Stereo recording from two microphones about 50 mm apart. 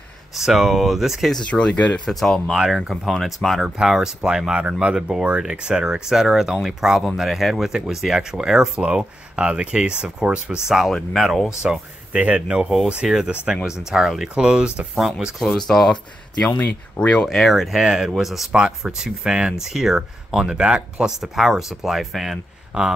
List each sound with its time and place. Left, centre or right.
0.4 s speech: centre
1.4 s speech: left
2.0 s speech: centre
3.9 s speech: centre
12.2 s speech: right; by 14.3 s centre
14.3 s speech: centre
15.3 s speech: centre
15.9 s speech: centre
17.3 s speech: centre
17.7 s speech: centre
21.2 s speech: centre
22.7 s speech: centre